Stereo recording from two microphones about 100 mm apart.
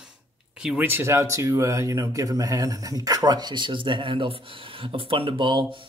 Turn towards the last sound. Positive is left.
turn(degrees=-55)  # may be behind; listen again after turning